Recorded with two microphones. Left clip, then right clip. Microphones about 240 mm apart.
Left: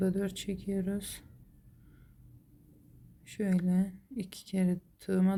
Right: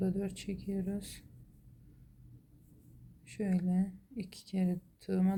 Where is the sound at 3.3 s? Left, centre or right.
Centre.